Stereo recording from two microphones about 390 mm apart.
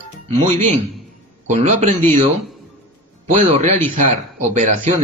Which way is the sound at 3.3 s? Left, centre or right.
Centre.